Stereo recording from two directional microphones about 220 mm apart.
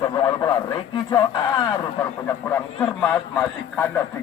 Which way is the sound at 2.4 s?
5° left (ahead or behind).